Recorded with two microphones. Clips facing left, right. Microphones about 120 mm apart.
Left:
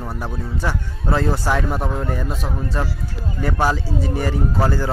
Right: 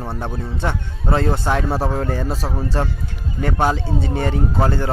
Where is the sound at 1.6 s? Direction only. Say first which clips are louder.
Right 2 dB; 35° right (ahead or behind).